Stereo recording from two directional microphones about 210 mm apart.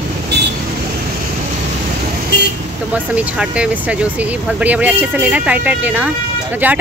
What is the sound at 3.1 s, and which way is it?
Speech, 5° right (ahead or behind).